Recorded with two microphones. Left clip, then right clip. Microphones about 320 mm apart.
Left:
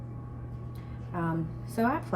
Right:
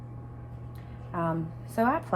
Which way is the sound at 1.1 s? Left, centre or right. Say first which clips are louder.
Right 3 dB; centre.